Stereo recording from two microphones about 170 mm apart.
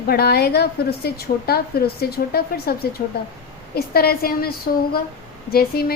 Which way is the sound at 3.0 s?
50° left (ahead or behind).